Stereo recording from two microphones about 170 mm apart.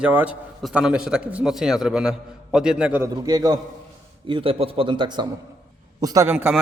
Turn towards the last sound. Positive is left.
turn(degrees=-10)  # may be behind; listen again after turning